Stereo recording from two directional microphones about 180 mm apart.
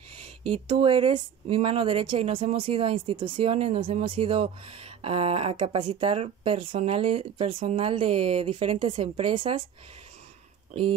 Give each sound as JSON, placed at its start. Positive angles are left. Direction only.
{"t": 0.2, "sound": "speech", "side_deg": -30}
{"t": 10.7, "sound": "speech", "side_deg": -30}